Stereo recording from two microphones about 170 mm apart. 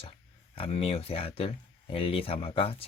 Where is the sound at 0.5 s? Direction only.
35° left (ahead or behind).